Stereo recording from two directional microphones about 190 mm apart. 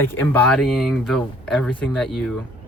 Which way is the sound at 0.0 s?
10° left (ahead or behind).